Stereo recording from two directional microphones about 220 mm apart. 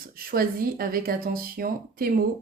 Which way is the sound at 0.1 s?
40° right (ahead or behind).